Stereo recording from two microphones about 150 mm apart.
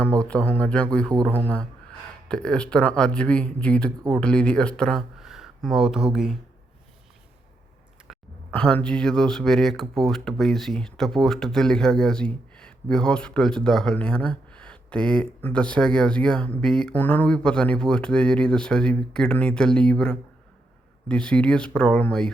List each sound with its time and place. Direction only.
0.0 s speech: 10° left (ahead or behind)
1.1 s a man's voice: 25° right (ahead or behind)
2.2 s speech: 5° left (ahead or behind)
8.0 s speech: centre (ahead or behind)